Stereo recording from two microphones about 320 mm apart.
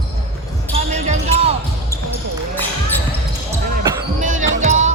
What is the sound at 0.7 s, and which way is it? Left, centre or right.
Basketball bounce, centre.